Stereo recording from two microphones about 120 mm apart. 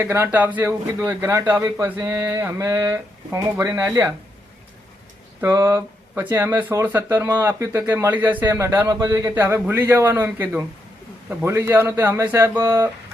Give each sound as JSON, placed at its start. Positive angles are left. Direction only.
{"t": 0.0, "sound": "speech", "side_deg": -20}
{"t": 5.4, "sound": "speech", "side_deg": -20}
{"t": 8.9, "sound": "speech", "side_deg": -30}
{"t": 9.3, "sound": "speech", "side_deg": -20}